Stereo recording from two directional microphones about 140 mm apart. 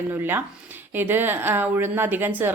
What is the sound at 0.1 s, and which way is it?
A woman's voice, 15° right (ahead or behind).